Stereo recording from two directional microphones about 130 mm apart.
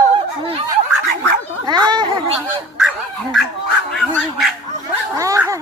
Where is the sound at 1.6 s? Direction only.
35° right (ahead or behind).